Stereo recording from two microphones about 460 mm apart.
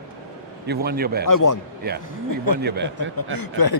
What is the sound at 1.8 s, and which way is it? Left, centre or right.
Speech, centre.